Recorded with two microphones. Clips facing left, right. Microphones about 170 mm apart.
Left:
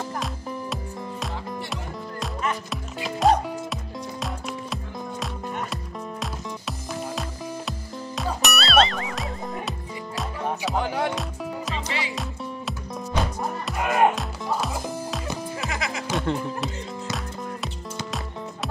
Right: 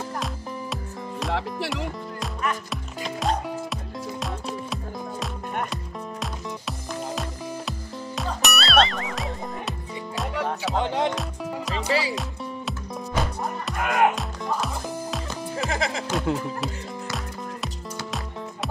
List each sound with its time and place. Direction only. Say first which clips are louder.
2.7 s music: left 1 dB; centre (ahead or behind)
6.9 s music: right 1 dB; centre (ahead or behind)
10.8 s music: right 2 dB; 25° right (ahead or behind)
11.1 s music: right 1 dB; centre (ahead or behind)
11.7 s music: right 5 dB; 35° right (ahead or behind)
12.2 s music: even; centre (ahead or behind)
15.7 s music: right 6 dB; 30° right (ahead or behind)
16.1 s music: left 3 dB; centre (ahead or behind)